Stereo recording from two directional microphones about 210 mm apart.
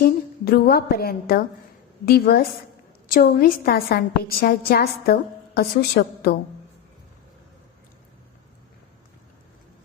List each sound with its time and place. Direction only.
0.0 s a woman's voice: 45° left (ahead or behind)